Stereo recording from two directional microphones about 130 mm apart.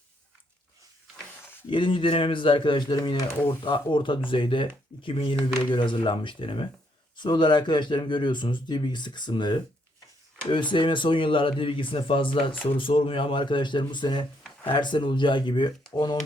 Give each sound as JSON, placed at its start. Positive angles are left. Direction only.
{"t": 1.7, "sound": "speech", "side_deg": 40}